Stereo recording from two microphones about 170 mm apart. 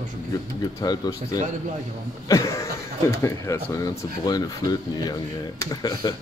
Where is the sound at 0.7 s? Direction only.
20° left (ahead or behind).